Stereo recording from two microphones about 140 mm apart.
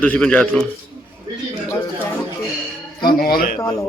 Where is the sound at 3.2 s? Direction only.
90° left.